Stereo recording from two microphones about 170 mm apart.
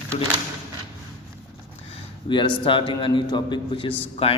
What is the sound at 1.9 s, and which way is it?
A man's voice, 30° left (ahead or behind).